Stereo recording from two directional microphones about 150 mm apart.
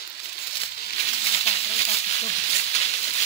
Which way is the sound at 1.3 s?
40° left (ahead or behind).